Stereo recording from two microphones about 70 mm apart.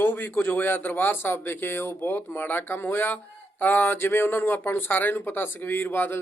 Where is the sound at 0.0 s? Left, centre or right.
Left.